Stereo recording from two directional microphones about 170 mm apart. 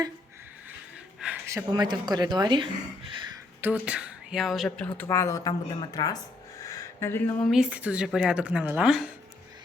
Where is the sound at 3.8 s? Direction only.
5° right (ahead or behind); by 6.1 s 25° left (ahead or behind).